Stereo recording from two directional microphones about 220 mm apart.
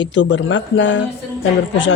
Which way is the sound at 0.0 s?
55° left (ahead or behind).